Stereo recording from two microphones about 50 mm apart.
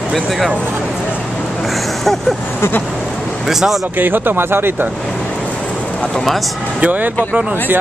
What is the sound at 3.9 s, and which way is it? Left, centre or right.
Speech, right.